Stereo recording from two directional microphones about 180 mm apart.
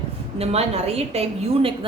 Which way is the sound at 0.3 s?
35° right (ahead or behind).